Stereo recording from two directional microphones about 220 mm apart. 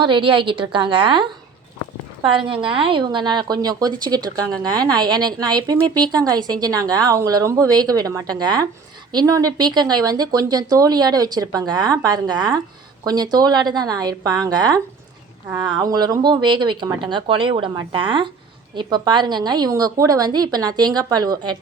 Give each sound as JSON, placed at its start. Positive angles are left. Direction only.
{"t": 0.0, "sound": "a woman's voice", "side_deg": -20}